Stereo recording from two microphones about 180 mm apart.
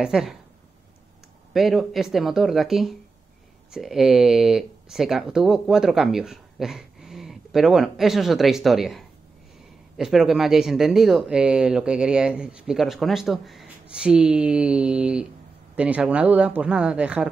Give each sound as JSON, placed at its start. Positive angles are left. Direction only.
{"t": 0.0, "sound": "speech", "side_deg": 0}
{"t": 1.5, "sound": "speech", "side_deg": 0}